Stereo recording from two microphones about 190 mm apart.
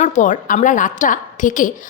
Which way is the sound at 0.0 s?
40° left (ahead or behind).